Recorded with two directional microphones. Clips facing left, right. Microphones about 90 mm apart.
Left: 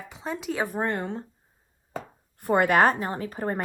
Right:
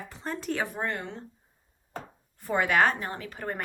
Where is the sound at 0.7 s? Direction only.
40° left (ahead or behind).